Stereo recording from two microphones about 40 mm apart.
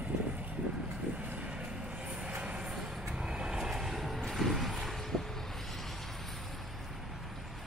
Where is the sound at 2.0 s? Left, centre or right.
Right.